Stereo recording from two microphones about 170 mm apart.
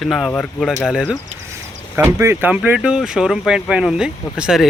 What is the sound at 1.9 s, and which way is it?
Speech, 15° right (ahead or behind).